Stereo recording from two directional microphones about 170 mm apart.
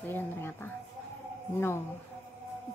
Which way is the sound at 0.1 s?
15° left (ahead or behind).